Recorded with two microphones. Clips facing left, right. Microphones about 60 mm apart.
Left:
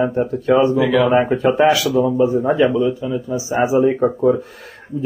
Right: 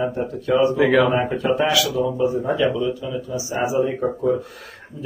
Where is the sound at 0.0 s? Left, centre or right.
Left.